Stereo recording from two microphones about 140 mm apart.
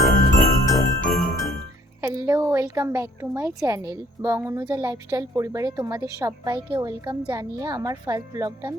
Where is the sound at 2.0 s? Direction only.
20° right (ahead or behind).